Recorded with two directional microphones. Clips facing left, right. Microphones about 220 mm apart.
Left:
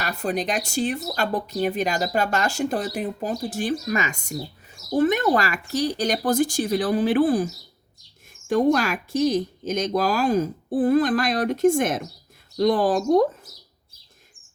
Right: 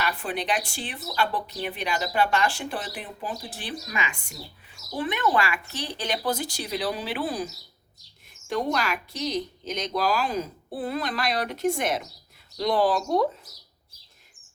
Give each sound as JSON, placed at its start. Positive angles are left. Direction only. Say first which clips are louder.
{"t": 0.0, "sound": "a woman's voice", "louder": "left 4 dB", "side_deg": 40}